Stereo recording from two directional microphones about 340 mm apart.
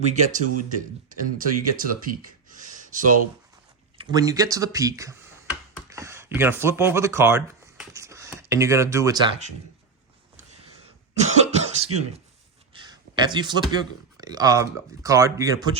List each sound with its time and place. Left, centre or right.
0.0 s speech: right
2.6 s gasp: right
3.9 s speech: centre
11.3 s cough: centre
12.7 s speech: centre